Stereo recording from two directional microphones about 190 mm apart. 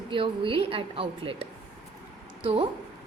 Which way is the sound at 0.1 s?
25° right (ahead or behind).